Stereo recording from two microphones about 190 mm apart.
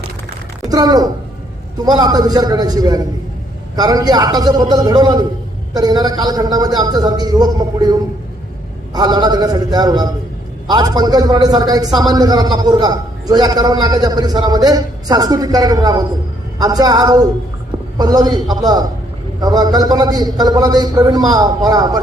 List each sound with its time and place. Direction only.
0.7 s a man's voice: 20° right (ahead or behind)